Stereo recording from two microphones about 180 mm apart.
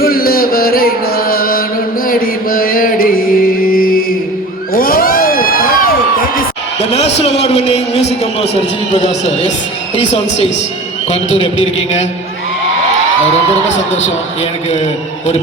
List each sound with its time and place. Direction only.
0.0 s chant: 55° left (ahead or behind)
4.7 s crowd: 55° left (ahead or behind)
6.7 s a man's voice: 35° left (ahead or behind)